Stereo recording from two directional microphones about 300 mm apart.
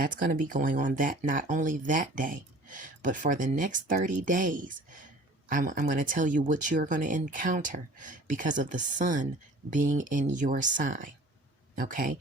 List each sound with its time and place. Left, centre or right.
0.0 s speech: right